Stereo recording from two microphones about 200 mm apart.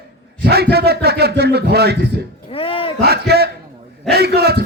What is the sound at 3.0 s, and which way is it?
A man's voice, 50° right (ahead or behind).